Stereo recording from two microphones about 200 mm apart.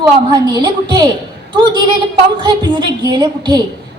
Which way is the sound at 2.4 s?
20° right (ahead or behind).